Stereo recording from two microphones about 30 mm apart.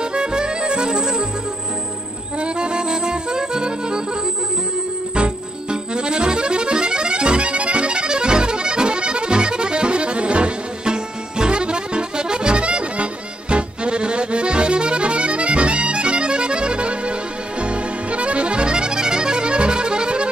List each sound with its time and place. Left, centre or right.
0.0 s music: right
2.4 s music: right
5.1 s accordion: right